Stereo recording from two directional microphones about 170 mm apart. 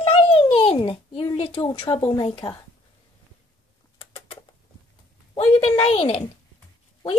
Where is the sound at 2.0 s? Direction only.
25° left (ahead or behind).